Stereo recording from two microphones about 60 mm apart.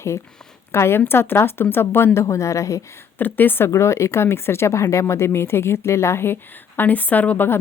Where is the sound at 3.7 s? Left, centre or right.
Left.